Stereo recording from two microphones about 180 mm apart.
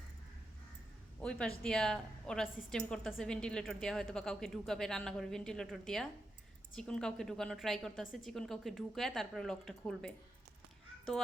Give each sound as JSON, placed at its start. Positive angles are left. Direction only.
{"t": 1.2, "sound": "a woman's voice", "side_deg": 5}